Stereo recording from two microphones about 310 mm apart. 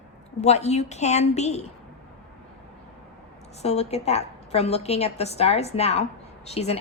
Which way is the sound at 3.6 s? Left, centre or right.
Centre.